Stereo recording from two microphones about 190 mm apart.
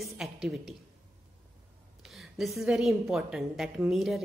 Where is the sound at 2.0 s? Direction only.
Centre (ahead or behind).